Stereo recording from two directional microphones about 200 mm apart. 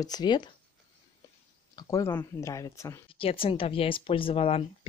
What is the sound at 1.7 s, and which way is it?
Speech, 15° left (ahead or behind).